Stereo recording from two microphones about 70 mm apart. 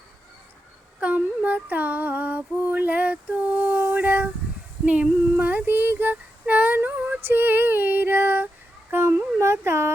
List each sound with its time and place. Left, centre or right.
0.9 s female singing: centre
8.9 s a sound: right
9.4 s speech: right